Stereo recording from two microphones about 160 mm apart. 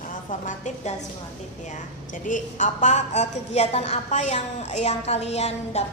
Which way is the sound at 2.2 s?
50° left (ahead or behind).